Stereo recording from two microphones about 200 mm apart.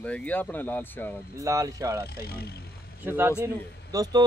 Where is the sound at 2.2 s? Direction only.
50° left (ahead or behind).